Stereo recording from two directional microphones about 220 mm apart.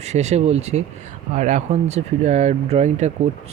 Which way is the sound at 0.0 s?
30° right (ahead or behind).